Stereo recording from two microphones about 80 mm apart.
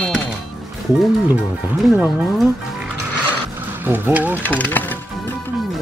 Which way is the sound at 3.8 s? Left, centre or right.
Right.